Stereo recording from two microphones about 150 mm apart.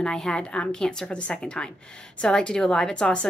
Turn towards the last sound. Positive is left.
turn(degrees=5)  # may be behind; listen again after turning